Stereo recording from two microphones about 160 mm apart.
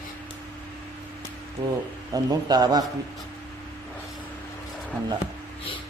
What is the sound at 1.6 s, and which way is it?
A man's voice, 20° right (ahead or behind).